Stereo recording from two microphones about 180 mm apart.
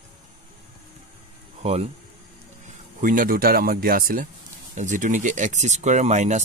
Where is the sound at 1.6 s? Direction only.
35° right (ahead or behind).